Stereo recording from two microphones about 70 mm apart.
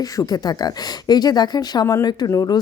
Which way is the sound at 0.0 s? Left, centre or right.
Left.